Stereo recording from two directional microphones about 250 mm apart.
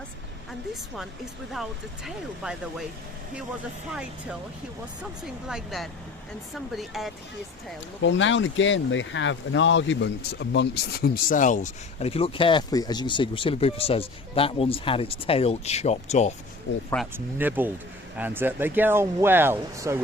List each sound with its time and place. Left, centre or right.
2.0 s speech: centre
5.2 s speech: centre
8.0 s speech: left
17.1 s speech: centre